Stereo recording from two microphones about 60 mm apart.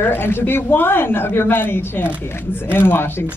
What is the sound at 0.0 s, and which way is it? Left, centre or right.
Speech, left.